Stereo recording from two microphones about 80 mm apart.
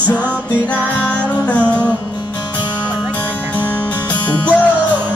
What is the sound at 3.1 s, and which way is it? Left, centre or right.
Music, centre.